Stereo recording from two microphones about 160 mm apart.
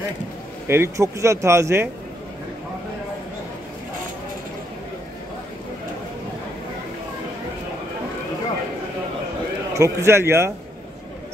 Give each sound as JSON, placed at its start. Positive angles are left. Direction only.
{"t": 0.7, "sound": "speech", "side_deg": -15}
{"t": 9.8, "sound": "speech", "side_deg": -15}